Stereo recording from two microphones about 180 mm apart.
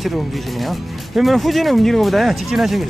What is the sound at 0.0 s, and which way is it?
Speech, centre (ahead or behind).